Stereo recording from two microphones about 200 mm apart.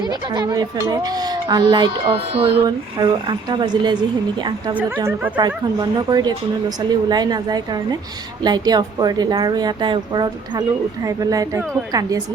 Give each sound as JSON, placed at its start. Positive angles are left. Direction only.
{"t": 0.1, "sound": "speech", "side_deg": -20}
{"t": 4.9, "sound": "a woman's voice", "side_deg": -15}